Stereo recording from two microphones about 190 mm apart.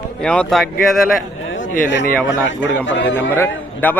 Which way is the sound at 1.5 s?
80° left.